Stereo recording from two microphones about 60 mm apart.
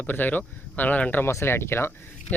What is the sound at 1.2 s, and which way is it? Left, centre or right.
Speech, left.